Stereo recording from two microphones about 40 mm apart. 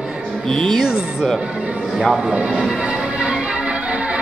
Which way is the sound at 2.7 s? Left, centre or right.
Centre.